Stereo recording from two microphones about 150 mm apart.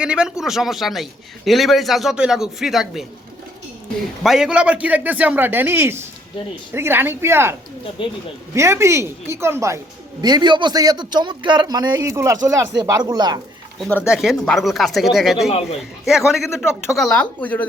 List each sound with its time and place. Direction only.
0.0 s a man's voice: 5° right (ahead or behind)
4.2 s a man's voice: 5° right (ahead or behind)
8.0 s speech: 35° left (ahead or behind)
8.5 s a woman's voice: 20° right (ahead or behind)
14.1 s a man's voice: 5° right (ahead or behind)